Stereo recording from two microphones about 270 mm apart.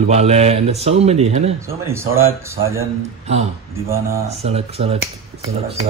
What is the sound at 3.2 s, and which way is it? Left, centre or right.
A man's voice, right.